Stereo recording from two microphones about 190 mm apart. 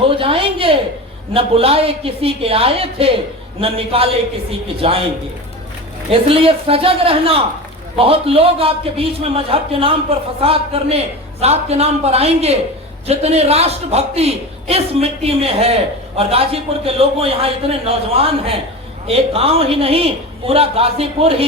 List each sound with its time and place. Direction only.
0.0 s a sound: 30° right (ahead or behind)
1.3 s a woman's voice: 30° right (ahead or behind)
6.1 s a woman's voice: 30° right (ahead or behind)